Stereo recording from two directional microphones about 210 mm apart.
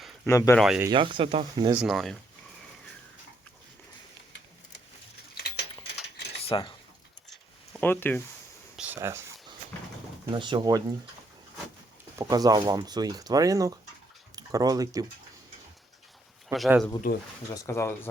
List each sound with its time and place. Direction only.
0.3 s speech: 15° left (ahead or behind)
0.6 s speech: 5° right (ahead or behind)
0.9 s speech: 25° right (ahead or behind)
1.7 s speech: 5° right (ahead or behind)
5.4 s a sound: 55° left (ahead or behind)
7.3 s a sound: 5° left (ahead or behind)
8.7 s a sound: 5° right (ahead or behind)
10.3 s speech: 20° right (ahead or behind)
12.2 s speech: 20° right (ahead or behind)
16.5 s speech: centre (ahead or behind)
17.5 s speech: 15° left (ahead or behind)